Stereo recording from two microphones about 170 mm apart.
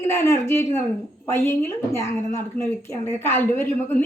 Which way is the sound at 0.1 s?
15° left (ahead or behind).